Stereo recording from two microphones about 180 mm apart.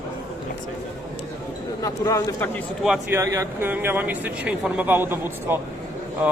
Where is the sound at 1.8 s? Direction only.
15° left (ahead or behind).